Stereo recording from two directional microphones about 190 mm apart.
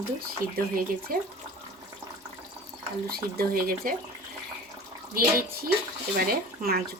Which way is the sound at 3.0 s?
50° right (ahead or behind).